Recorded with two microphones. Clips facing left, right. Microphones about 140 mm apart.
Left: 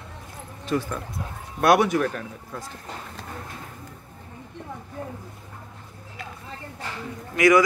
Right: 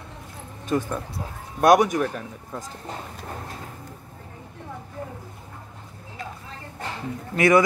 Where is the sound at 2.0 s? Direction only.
10° right (ahead or behind).